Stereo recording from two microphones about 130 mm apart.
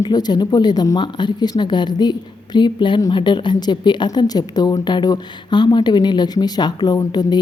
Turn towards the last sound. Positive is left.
turn(degrees=30)  # may be behind; listen again after turning